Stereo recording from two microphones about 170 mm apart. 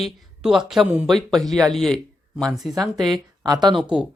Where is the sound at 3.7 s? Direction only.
5° right (ahead or behind).